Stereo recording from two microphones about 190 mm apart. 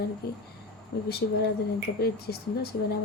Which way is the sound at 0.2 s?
55° left (ahead or behind).